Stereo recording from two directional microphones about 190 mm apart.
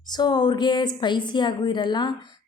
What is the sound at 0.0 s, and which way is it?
A woman's voice, 20° left (ahead or behind).